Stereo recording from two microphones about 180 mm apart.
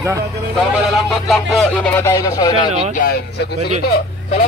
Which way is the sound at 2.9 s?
55° left (ahead or behind).